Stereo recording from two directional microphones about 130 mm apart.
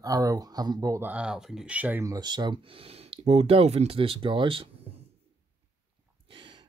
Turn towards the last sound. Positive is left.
turn(degrees=-40)  # may be behind; listen again after turning